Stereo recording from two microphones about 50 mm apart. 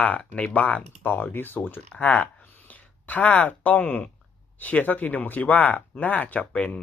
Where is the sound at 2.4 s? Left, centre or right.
Left.